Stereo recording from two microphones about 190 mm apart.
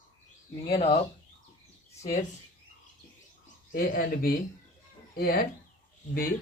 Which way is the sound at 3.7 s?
50° left (ahead or behind).